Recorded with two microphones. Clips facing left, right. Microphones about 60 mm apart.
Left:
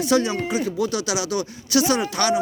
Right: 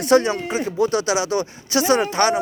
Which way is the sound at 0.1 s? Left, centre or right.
Right.